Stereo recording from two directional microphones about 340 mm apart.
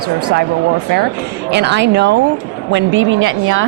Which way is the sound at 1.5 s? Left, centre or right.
Right.